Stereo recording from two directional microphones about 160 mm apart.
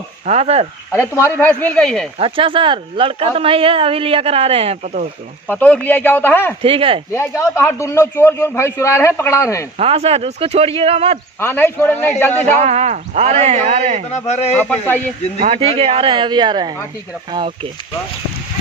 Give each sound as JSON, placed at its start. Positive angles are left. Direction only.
{"t": 0.3, "sound": "speech", "side_deg": -40}
{"t": 0.9, "sound": "a man's voice", "side_deg": 15}
{"t": 2.1, "sound": "speech", "side_deg": -35}
{"t": 5.5, "sound": "a man's voice", "side_deg": 10}
{"t": 6.6, "sound": "speech", "side_deg": -35}
{"t": 7.1, "sound": "a man's voice", "side_deg": 15}
{"t": 9.7, "sound": "speech", "side_deg": -35}
{"t": 11.3, "sound": "a man's voice", "side_deg": 15}
{"t": 12.5, "sound": "speech", "side_deg": -45}
{"t": 14.1, "sound": "a man's voice", "side_deg": 45}
{"t": 14.5, "sound": "a man's voice", "side_deg": 10}
{"t": 15.4, "sound": "speech", "side_deg": -35}